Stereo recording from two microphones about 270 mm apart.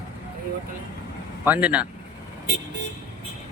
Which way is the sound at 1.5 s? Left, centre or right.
Centre.